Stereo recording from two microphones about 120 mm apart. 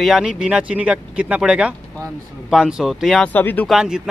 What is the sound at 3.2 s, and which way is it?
Speech, 15° left (ahead or behind).